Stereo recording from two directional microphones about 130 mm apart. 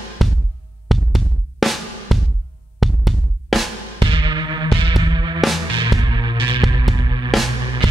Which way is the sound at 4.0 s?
40° right (ahead or behind).